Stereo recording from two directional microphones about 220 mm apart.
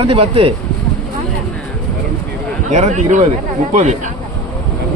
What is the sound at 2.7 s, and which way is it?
Speech, 35° right (ahead or behind).